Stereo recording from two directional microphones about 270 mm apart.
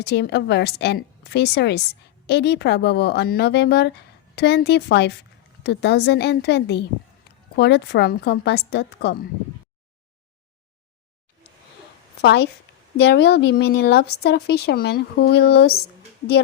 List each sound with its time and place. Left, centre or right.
0.0 s a woman's voice: left
12.2 s a woman's voice: left